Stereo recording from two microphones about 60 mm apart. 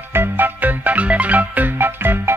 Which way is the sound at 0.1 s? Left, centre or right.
Right.